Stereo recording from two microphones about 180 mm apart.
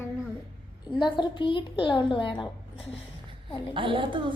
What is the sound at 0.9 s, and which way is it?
Speech, 25° left (ahead or behind).